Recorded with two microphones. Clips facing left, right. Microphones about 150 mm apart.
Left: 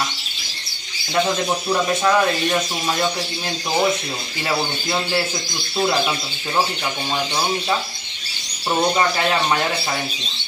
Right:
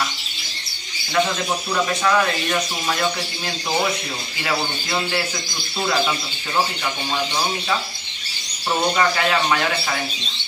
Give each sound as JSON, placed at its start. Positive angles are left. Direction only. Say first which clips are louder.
{"t": 1.2, "sound": "speech", "louder": "left 3 dB", "side_deg": 25}
{"t": 8.9, "sound": "speech", "louder": "even", "side_deg": 25}